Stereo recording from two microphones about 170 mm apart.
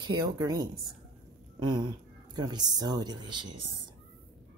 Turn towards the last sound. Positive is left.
turn(degrees=-25)  # may be behind; listen again after turning